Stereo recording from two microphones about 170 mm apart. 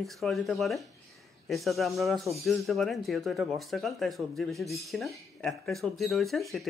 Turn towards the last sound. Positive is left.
turn(degrees=0)  # may be behind; listen again after turning